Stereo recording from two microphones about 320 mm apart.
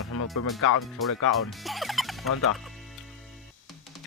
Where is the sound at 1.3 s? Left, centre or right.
Centre.